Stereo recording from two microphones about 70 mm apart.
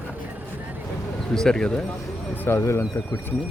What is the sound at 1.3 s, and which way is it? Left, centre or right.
Speech, centre.